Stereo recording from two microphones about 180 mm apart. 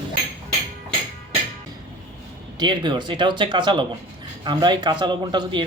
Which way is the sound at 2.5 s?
25° right (ahead or behind).